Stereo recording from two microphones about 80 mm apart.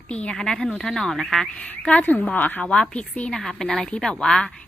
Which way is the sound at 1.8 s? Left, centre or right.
Centre.